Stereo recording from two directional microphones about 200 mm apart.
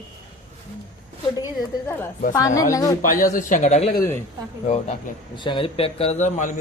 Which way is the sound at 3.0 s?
45° left (ahead or behind).